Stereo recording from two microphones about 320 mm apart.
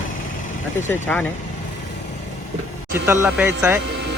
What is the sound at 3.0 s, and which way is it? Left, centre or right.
Speech, centre.